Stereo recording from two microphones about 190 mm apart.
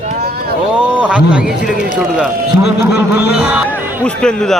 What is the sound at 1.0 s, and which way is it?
Speech, 5° right (ahead or behind).